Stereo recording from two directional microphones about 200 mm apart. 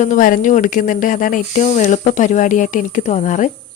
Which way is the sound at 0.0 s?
40° left (ahead or behind).